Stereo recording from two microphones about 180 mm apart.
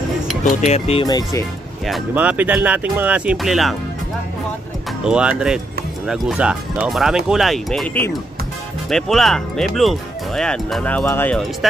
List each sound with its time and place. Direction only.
0.6 s speech: 35° left (ahead or behind)
1.0 s speech: 20° left (ahead or behind)
1.9 s speech: 5° right (ahead or behind)
5.0 s speech: 5° right (ahead or behind)